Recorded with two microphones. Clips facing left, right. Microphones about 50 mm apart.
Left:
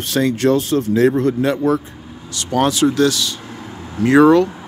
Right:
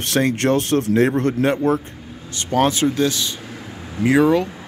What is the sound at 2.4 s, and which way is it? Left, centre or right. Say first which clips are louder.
Speech: left 2 dB; right.